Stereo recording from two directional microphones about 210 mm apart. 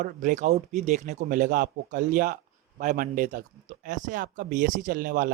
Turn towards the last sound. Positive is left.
turn(degrees=-40)  # may be behind; listen again after turning